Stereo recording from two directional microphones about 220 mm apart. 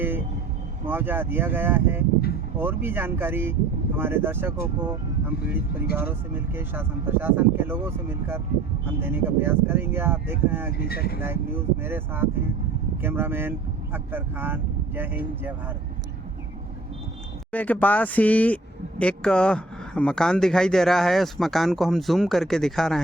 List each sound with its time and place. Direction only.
0.9 s speech: 10° right (ahead or behind)
6.0 s speech: 10° right (ahead or behind)
10.8 s speech: 45° left (ahead or behind)
11.2 s speech: 10° right (ahead or behind)
17.5 s speech: 5° left (ahead or behind)